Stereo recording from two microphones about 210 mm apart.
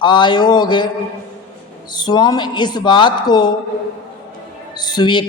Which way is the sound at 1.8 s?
20° left (ahead or behind).